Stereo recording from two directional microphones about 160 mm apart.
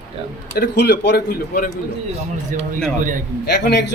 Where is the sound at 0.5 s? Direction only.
80° left.